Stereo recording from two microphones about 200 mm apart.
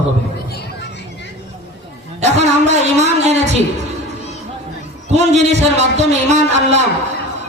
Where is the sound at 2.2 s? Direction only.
35° right (ahead or behind).